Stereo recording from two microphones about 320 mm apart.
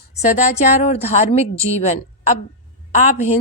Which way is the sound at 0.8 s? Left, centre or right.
Centre.